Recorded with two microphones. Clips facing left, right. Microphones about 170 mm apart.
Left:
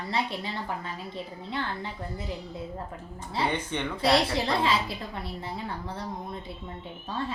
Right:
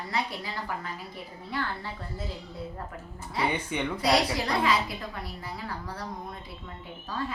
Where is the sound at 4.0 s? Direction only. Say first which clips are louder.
Left 2 dB; 25° left (ahead or behind).